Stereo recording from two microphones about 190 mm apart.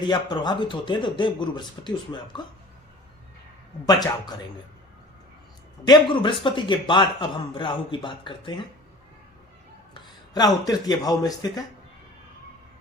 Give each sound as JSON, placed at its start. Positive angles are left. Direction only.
{"t": 0.0, "sound": "a man's voice", "side_deg": 25}
{"t": 3.8, "sound": "a man's voice", "side_deg": 20}
{"t": 5.8, "sound": "a man's voice", "side_deg": 25}
{"t": 9.9, "sound": "speech", "side_deg": 20}